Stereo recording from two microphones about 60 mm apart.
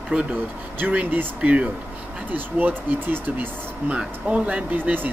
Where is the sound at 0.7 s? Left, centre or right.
Right.